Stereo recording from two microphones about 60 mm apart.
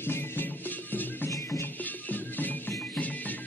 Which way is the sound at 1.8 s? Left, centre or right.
Left.